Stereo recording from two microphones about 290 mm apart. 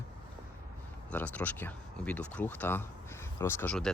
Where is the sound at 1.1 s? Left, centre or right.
Centre.